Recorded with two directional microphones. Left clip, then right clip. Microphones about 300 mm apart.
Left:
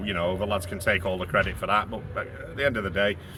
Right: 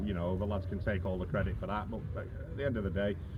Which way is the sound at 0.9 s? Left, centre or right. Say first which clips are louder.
Left 12 dB; centre.